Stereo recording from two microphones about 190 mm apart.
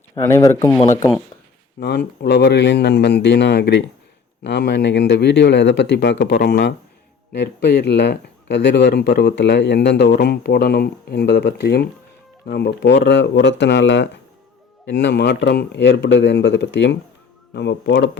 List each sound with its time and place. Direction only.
0.3 s speech: 15° left (ahead or behind)
2.2 s speech: 65° left (ahead or behind)